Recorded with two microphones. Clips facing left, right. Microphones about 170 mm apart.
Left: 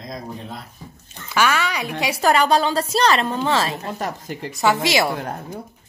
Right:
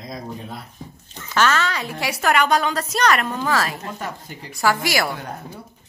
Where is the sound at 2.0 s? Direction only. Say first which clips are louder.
Left 2 dB; 30° left (ahead or behind).